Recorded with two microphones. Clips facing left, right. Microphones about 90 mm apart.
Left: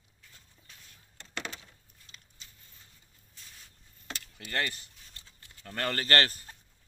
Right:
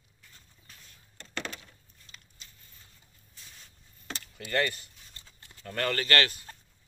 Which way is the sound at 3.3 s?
Centre (ahead or behind).